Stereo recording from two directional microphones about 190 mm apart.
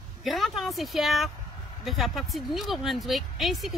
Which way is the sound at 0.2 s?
Centre (ahead or behind).